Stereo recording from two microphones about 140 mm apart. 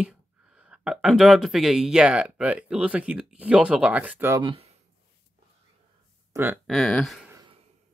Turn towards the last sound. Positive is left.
turn(degrees=0)  # may be behind; listen again after turning